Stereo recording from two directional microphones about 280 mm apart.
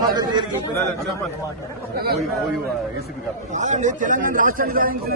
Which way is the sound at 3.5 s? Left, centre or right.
Right.